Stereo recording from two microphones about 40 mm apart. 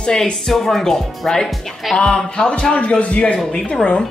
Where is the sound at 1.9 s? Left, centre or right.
Centre.